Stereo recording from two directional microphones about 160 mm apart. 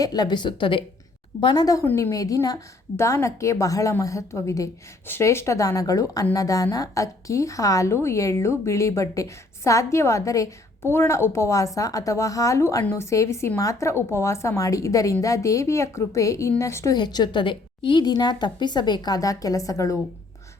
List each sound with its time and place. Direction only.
0.0 s a woman's voice: 25° left (ahead or behind)